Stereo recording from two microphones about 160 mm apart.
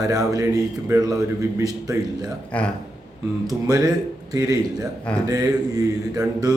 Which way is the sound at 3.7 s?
25° right (ahead or behind).